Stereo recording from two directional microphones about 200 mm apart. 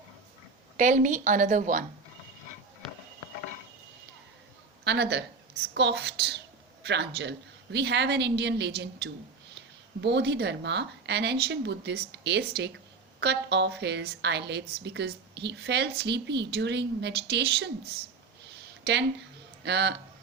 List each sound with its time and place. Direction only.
0.8 s a woman's voice: 40° right (ahead or behind)
4.8 s a woman's voice: 55° right (ahead or behind)
18.9 s a woman's voice: 55° right (ahead or behind)